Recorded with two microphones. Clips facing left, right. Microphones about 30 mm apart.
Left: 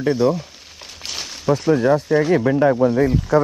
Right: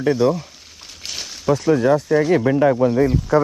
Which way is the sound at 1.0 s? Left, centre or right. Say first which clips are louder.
Left 1 dB; centre.